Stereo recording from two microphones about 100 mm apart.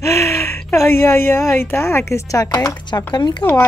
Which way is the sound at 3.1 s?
45° left (ahead or behind).